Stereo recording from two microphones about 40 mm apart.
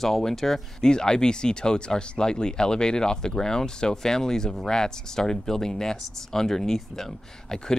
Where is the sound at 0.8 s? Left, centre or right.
Centre.